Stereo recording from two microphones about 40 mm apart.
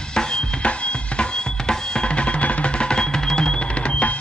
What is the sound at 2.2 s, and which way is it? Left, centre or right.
Music, left.